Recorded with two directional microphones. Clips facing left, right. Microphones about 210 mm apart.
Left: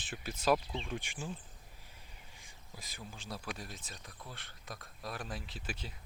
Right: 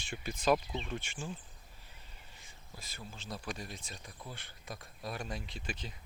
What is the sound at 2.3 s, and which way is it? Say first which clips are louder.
Speech: even; 15° left (ahead or behind).